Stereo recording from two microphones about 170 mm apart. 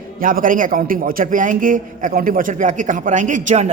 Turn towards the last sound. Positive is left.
turn(degrees=-45)  # may be behind; listen again after turning